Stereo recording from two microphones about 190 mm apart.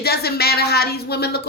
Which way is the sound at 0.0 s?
55° left (ahead or behind).